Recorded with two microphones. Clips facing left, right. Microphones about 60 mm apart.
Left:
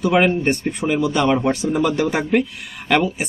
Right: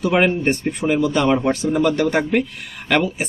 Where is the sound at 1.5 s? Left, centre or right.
Centre.